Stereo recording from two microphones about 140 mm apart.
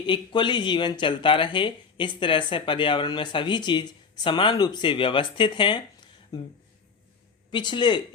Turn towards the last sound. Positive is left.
turn(degrees=35)  # may be behind; listen again after turning